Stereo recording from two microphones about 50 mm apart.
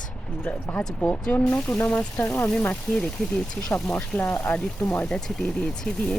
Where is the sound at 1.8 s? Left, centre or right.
Left.